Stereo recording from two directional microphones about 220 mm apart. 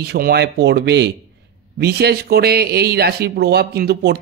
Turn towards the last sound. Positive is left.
turn(degrees=-45)  # may be behind; listen again after turning